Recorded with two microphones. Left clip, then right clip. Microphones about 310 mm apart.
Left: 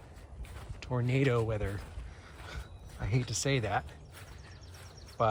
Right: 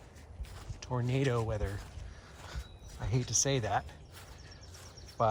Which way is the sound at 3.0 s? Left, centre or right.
Centre.